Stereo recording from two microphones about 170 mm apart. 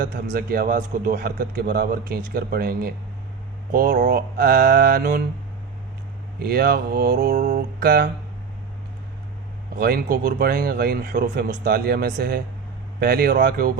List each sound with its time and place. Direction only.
0.0 s a man's voice: 55° right (ahead or behind)
6.4 s mantra: 65° right (ahead or behind)
7.3 s mantra: 45° right (ahead or behind)
9.7 s a man's voice: 60° right (ahead or behind)